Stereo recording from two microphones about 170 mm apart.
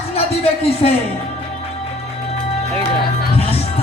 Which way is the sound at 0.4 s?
35° left (ahead or behind).